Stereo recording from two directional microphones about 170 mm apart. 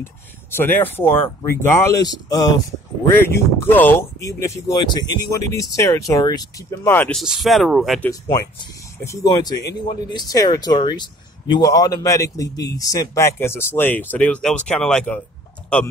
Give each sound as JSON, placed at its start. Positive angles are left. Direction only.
{"t": 0.6, "sound": "speech", "side_deg": 10}
{"t": 7.2, "sound": "speech", "side_deg": 0}
{"t": 8.1, "sound": "speech", "side_deg": 20}